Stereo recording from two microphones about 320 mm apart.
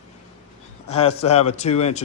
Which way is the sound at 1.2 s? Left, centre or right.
Centre.